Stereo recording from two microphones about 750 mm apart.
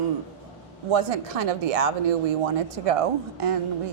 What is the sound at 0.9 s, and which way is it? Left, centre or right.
A woman's voice, right.